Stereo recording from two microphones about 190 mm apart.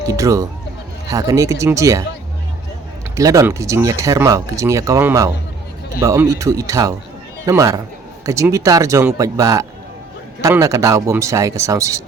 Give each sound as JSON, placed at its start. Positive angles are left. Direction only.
{"t": 0.1, "sound": "a sound", "side_deg": -15}
{"t": 1.1, "sound": "speech", "side_deg": -15}
{"t": 3.2, "sound": "speech", "side_deg": -15}